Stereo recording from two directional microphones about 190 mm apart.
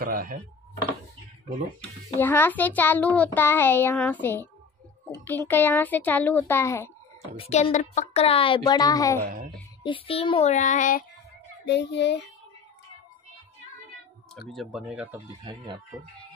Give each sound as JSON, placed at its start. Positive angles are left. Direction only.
{"t": 0.0, "sound": "dishes", "side_deg": -50}
{"t": 2.1, "sound": "a child's voice", "side_deg": 10}
{"t": 7.3, "sound": "a child's voice", "side_deg": 30}
{"t": 9.2, "sound": "speech", "side_deg": -45}
{"t": 9.8, "sound": "child singing", "side_deg": 30}
{"t": 11.6, "sound": "a child's voice", "side_deg": 65}
{"t": 14.5, "sound": "speech", "side_deg": 0}
{"t": 15.4, "sound": "speech", "side_deg": -25}